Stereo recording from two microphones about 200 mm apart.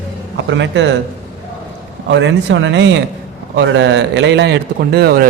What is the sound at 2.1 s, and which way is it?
A man's voice, 65° right (ahead or behind).